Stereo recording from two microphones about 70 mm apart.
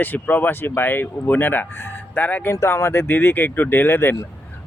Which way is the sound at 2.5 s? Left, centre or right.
Left.